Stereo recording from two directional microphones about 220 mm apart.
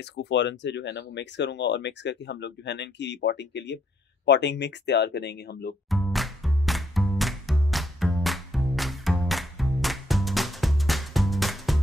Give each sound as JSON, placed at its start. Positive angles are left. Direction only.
{"t": 0.1, "sound": "speech", "side_deg": 50}
{"t": 5.9, "sound": "music", "side_deg": 0}